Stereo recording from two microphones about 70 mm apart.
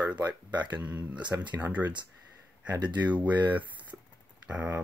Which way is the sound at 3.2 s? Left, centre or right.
Right.